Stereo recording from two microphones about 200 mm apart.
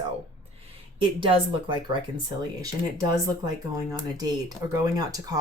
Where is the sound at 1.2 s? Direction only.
25° right (ahead or behind).